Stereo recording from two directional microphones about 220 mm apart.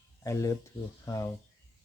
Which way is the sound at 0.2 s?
15° left (ahead or behind).